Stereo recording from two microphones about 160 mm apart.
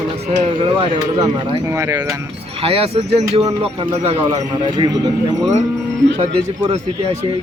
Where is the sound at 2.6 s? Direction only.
40° right (ahead or behind).